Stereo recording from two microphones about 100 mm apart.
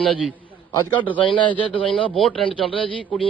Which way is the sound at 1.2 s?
55° left (ahead or behind).